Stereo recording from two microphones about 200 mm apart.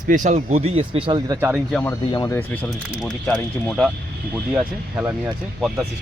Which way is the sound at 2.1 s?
20° left (ahead or behind).